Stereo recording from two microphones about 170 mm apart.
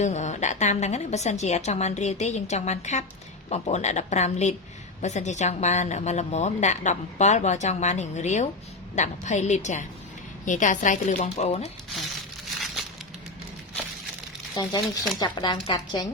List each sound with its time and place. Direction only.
0.0 s a woman's voice: 45° left (ahead or behind)
12.5 s a sound: centre (ahead or behind)
14.6 s speech: 25° left (ahead or behind)